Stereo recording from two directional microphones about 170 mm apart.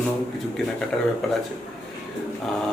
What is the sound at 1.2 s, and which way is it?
Speech, centre (ahead or behind).